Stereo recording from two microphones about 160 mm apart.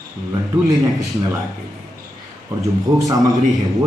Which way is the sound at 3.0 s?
25° right (ahead or behind).